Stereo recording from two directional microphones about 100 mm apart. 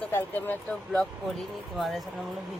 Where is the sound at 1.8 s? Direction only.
Centre (ahead or behind).